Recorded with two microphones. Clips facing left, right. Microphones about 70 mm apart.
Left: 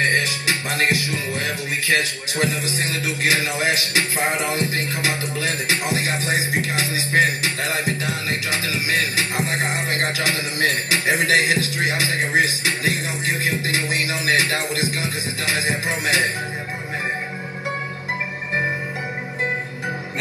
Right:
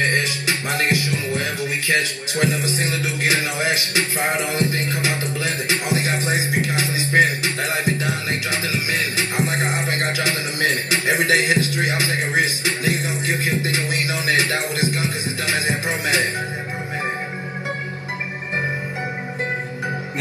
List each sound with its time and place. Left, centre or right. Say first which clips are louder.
0.0 s music: even; right
1.9 s speech: left 1 dB; right
3.5 s a sound: even; right
4.5 s music: right 1 dB; right